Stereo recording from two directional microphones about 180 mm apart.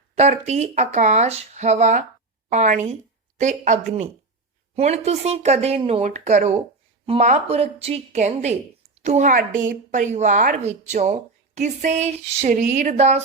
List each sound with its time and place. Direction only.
0.2 s a woman's voice: 40° right (ahead or behind)